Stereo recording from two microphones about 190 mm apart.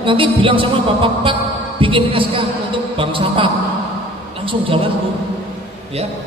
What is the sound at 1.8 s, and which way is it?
Speech, 25° right (ahead or behind).